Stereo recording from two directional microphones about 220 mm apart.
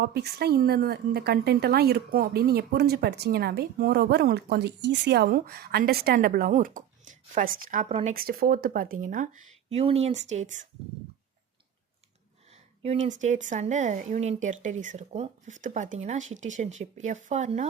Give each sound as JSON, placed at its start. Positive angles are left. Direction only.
{"t": 0.0, "sound": "a woman's voice", "side_deg": -50}
{"t": 12.8, "sound": "speech", "side_deg": -30}